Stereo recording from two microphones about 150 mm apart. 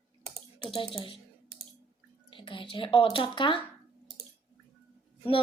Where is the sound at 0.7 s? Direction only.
35° left (ahead or behind).